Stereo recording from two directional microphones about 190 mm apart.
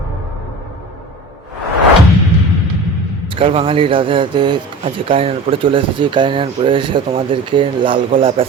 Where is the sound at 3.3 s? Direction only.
30° right (ahead or behind).